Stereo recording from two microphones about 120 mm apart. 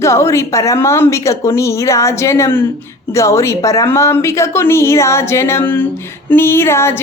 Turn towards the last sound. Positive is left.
turn(degrees=20)  # may be behind; listen again after turning